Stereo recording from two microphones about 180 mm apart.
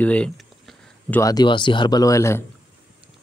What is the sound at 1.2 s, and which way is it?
Speech, 20° left (ahead or behind).